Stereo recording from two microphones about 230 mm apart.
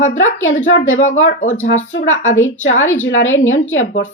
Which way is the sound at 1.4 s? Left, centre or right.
Left.